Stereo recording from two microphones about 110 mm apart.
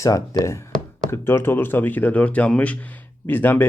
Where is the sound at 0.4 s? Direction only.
25° left (ahead or behind).